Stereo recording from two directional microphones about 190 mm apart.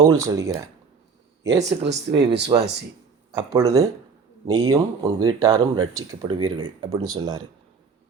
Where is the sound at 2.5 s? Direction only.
25° right (ahead or behind).